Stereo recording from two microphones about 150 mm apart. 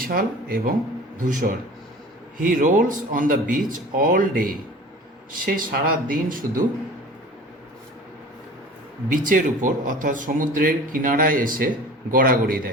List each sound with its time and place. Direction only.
0.0 s speech: 75° right (ahead or behind)
1.2 s a man's voice: 60° right (ahead or behind)
9.0 s a man's voice: 65° right (ahead or behind)